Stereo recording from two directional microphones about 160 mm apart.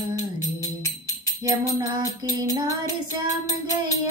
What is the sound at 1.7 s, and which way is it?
Music, 25° right (ahead or behind).